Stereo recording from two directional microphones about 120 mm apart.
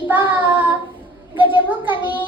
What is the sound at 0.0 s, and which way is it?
Child singing, 15° right (ahead or behind).